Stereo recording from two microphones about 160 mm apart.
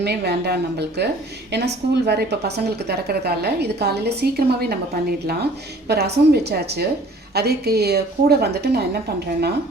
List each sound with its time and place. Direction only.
0.0 s a woman's voice: 90° right